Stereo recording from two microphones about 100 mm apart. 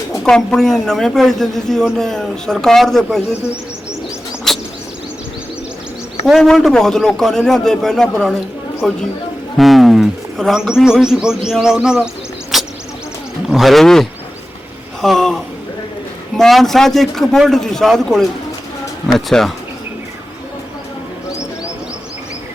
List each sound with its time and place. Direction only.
0.3 s a man's voice: 5° left (ahead or behind)
4.5 s a sound: 5° left (ahead or behind)
6.2 s a man's voice: centre (ahead or behind)
12.5 s a sound: centre (ahead or behind)
13.5 s a man's voice: centre (ahead or behind)
16.4 s a man's voice: centre (ahead or behind)